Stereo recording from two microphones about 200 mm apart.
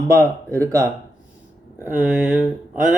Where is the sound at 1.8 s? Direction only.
10° right (ahead or behind).